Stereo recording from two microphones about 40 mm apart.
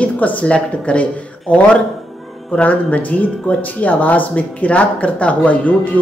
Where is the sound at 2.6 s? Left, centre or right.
Left.